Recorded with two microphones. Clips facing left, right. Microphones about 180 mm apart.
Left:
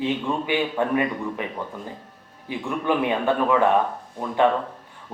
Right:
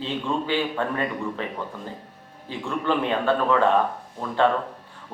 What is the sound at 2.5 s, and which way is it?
Speech, 15° left (ahead or behind).